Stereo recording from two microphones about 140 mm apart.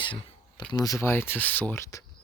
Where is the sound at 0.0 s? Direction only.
40° left (ahead or behind).